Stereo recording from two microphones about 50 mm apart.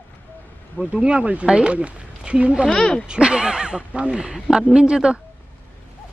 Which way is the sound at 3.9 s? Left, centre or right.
Right.